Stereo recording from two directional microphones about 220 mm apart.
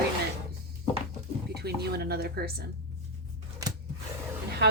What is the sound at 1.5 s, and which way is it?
Speech, 45° right (ahead or behind).